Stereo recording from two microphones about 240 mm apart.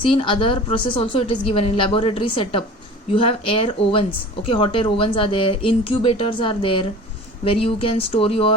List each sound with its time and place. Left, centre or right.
0.0 s a woman's voice: left